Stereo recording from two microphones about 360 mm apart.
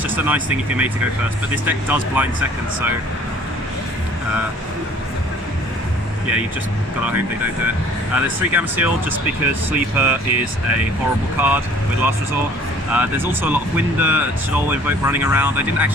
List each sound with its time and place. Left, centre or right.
0.2 s speech: centre
8.1 s speech: centre
12.9 s speech: centre